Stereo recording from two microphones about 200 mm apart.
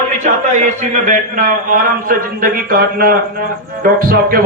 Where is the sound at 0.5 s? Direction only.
40° right (ahead or behind).